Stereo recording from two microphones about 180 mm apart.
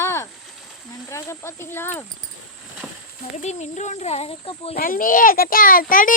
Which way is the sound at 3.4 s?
40° left (ahead or behind).